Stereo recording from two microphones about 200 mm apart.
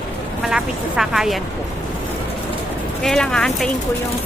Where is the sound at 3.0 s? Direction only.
5° left (ahead or behind).